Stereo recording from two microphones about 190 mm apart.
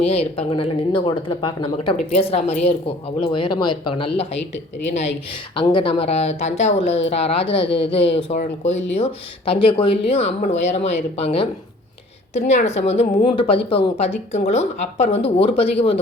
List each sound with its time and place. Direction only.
0.0 s a woman's voice: 30° left (ahead or behind)